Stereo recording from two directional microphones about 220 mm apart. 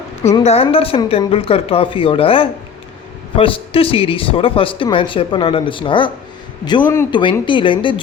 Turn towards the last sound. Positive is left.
turn(degrees=20)  # may be behind; listen again after turning